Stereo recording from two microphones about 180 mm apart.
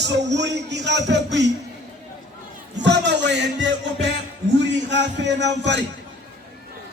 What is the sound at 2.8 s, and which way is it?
Music, 75° right (ahead or behind).